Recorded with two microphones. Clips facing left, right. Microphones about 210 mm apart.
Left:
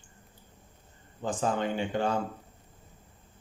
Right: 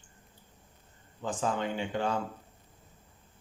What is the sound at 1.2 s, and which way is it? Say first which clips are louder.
Speech: left 2 dB; 40° left (ahead or behind).